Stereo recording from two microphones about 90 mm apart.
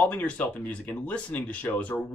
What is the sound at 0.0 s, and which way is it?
Speech, 15° left (ahead or behind).